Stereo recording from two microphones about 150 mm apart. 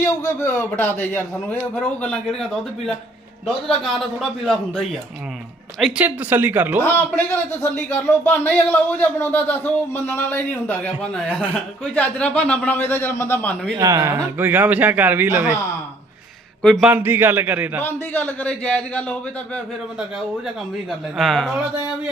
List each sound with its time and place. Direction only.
0.0 s a man's voice: 20° left (ahead or behind); by 4.9 s centre (ahead or behind)
5.8 s speech: 10° right (ahead or behind)
7.5 s speech: 15° left (ahead or behind)
13.7 s speech: 20° right (ahead or behind)
16.8 s speech: 15° right (ahead or behind)
17.8 s speech: 10° left (ahead or behind)
21.2 s a man's voice: centre (ahead or behind)